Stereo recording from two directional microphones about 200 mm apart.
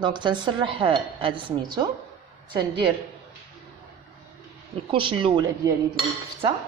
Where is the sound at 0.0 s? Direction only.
25° right (ahead or behind).